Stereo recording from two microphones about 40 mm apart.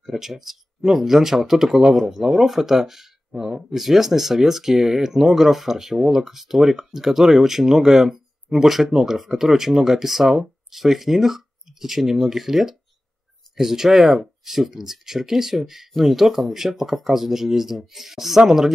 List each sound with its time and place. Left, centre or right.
0.0 s speech: centre
3.3 s speech: right
3.7 s speech: centre